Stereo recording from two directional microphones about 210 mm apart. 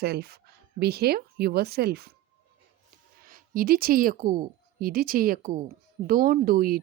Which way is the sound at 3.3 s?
40° right (ahead or behind).